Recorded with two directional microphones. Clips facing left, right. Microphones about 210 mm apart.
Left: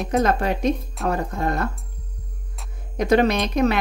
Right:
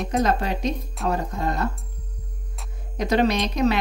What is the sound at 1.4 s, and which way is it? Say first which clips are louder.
Speech: left 2 dB; 55° left (ahead or behind).